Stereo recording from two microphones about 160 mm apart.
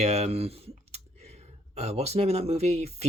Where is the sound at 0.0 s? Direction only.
45° right (ahead or behind).